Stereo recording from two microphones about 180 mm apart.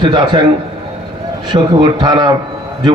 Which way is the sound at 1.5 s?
25° right (ahead or behind).